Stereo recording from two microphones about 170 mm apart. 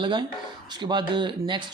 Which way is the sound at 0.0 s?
25° right (ahead or behind).